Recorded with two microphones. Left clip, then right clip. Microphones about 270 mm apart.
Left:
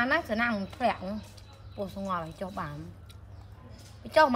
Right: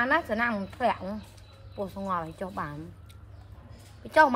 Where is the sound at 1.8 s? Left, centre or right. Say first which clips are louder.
Right 2 dB; centre.